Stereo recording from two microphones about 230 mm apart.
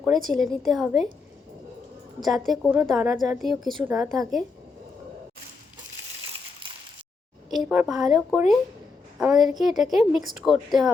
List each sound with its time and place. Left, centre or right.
0.0 s a woman's voice: centre
2.2 s a woman's voice: centre
7.5 s a woman's voice: centre